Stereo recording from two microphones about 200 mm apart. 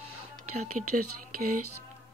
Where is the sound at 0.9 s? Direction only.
50° right (ahead or behind).